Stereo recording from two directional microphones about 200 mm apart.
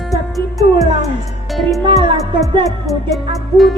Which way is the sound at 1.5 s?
Centre (ahead or behind).